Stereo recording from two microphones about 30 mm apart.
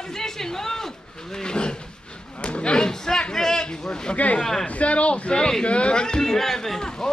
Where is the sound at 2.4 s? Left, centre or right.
Left; by 3.6 s centre.